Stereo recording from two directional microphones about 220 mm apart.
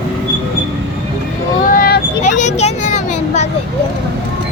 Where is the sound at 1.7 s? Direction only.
40° left (ahead or behind).